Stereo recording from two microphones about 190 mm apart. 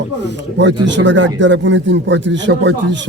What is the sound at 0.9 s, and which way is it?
A man's voice, 70° right (ahead or behind).